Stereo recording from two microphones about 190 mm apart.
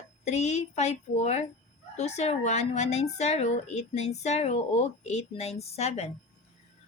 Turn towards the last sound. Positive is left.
turn(degrees=35)  # may be behind; listen again after turning